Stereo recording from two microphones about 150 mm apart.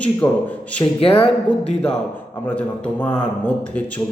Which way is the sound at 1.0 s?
40° left (ahead or behind).